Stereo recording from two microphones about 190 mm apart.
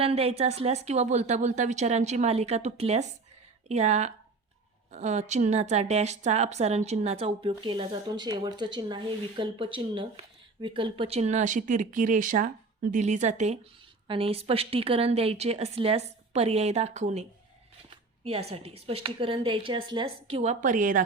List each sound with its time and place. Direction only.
0.0 s a woman's voice: 30° right (ahead or behind)